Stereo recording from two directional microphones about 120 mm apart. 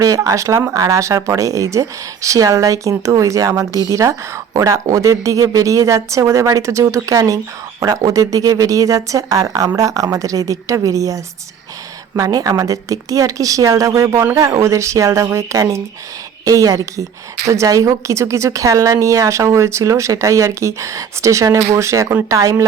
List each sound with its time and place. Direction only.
0.0 s a woman's voice: 25° right (ahead or behind)